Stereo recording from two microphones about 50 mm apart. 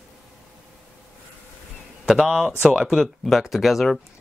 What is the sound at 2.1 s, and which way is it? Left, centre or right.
Speech, centre.